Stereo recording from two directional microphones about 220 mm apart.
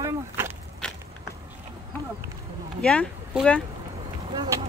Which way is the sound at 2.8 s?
5° left (ahead or behind).